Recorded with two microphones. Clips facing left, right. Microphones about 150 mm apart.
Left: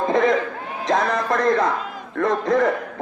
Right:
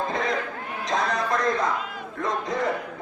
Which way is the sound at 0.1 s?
55° left (ahead or behind).